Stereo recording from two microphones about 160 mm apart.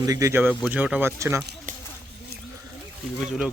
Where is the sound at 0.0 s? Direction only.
20° right (ahead or behind).